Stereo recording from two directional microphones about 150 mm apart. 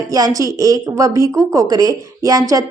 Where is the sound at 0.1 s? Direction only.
25° right (ahead or behind).